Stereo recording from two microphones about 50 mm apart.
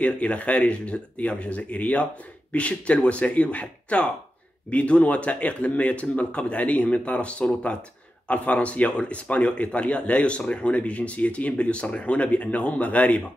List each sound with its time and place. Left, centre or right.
0.0 s speech: left